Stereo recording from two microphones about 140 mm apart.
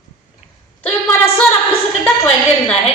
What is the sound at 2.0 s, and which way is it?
Speech, 15° left (ahead or behind).